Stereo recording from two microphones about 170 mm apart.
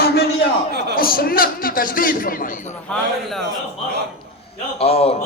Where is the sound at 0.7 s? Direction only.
75° right (ahead or behind).